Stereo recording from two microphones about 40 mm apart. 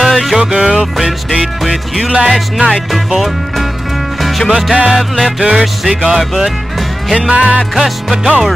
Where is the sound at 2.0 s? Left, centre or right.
Centre.